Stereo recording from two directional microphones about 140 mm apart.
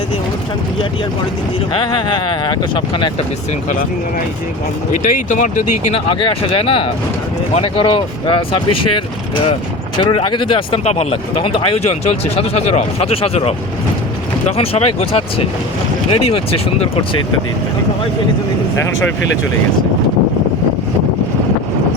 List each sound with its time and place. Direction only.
1.7 s speech: 35° left (ahead or behind)
5.0 s speech: 65° left (ahead or behind)
6.1 s speech: 40° left (ahead or behind)
10.0 s speech: 35° left (ahead or behind)